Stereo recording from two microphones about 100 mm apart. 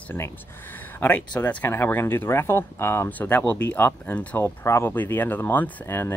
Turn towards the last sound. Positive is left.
turn(degrees=20)  # may be behind; listen again after turning